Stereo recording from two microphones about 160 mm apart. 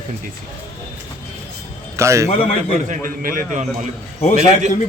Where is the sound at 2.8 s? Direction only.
60° right (ahead or behind).